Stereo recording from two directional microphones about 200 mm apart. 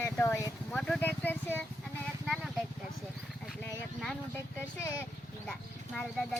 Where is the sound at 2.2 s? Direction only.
Centre (ahead or behind).